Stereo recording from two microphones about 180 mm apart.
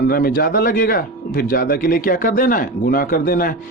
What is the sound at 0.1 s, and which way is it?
Speech, 55° left (ahead or behind).